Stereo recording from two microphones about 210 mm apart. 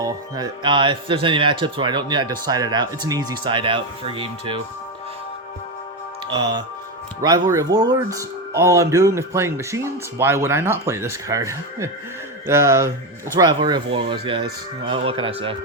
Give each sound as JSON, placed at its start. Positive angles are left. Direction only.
{"t": 0.0, "sound": "speech", "side_deg": -20}
{"t": 6.2, "sound": "speech", "side_deg": -20}